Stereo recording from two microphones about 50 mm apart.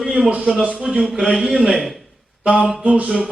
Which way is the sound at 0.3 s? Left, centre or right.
Right.